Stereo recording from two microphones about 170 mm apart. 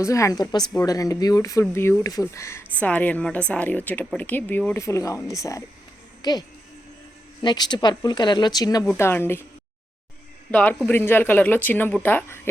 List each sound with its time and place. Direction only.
0.0 s speech: 20° left (ahead or behind)
7.4 s speech: 25° left (ahead or behind)
10.5 s speech: 10° left (ahead or behind)